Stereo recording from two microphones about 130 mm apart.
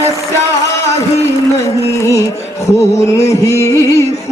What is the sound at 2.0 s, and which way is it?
Music, 25° left (ahead or behind).